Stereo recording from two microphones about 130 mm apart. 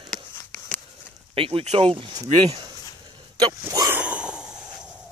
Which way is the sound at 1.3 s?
45° right (ahead or behind).